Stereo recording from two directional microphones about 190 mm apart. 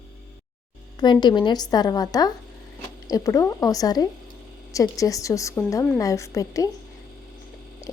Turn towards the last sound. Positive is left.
turn(degrees=15)  # may be behind; listen again after turning